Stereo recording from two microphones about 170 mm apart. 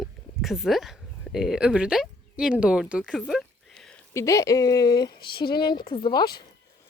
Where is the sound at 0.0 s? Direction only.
Centre (ahead or behind).